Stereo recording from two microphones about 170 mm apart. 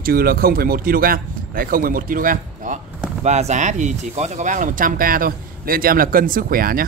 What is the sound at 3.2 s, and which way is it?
Speech, 40° right (ahead or behind).